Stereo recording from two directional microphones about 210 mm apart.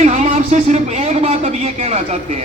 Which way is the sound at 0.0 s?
35° right (ahead or behind).